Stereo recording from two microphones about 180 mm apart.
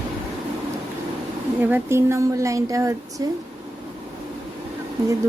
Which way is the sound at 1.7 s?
15° right (ahead or behind).